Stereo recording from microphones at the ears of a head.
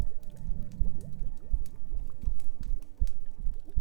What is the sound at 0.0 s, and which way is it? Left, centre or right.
Music, right.